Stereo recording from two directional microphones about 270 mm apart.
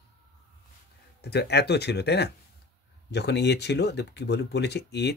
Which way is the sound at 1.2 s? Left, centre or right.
Left.